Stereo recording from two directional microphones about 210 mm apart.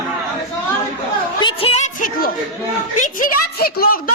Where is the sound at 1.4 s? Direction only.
25° left (ahead or behind).